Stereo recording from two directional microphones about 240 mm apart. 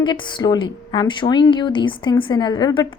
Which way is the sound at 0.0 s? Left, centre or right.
Centre.